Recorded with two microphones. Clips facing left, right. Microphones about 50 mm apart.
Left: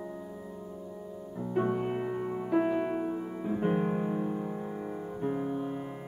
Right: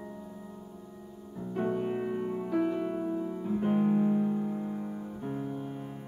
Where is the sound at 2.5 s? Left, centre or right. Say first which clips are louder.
Left 3 dB; left.